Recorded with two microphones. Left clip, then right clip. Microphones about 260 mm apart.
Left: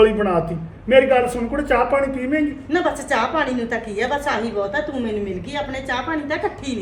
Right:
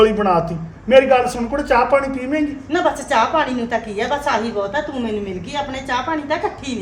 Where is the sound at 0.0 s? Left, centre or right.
Centre.